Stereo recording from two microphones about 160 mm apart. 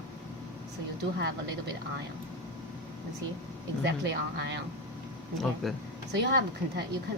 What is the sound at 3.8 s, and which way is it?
Speech, 90° right.